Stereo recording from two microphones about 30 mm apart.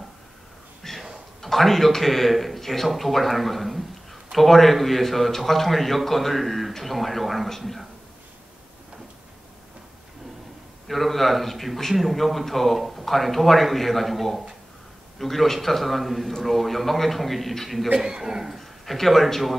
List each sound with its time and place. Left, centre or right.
0.8 s a sound: centre
1.4 s a man's voice: centre
10.9 s speech: centre
17.9 s speech: right
18.6 s a man's voice: centre